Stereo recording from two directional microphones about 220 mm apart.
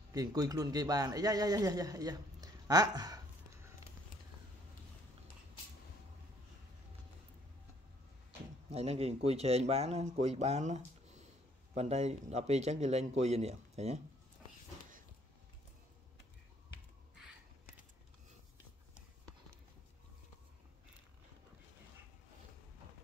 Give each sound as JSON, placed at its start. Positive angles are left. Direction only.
{"t": 0.1, "sound": "a man's voice", "side_deg": -15}
{"t": 8.6, "sound": "a man's voice", "side_deg": -30}